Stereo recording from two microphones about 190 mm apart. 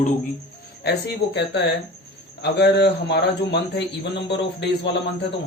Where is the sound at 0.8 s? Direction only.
60° left (ahead or behind).